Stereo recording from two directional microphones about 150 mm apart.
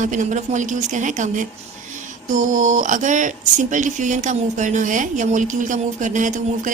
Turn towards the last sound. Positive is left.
turn(degrees=-60)  # may be behind; listen again after turning